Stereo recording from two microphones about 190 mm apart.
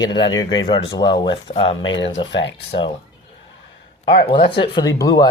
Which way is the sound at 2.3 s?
70° left (ahead or behind).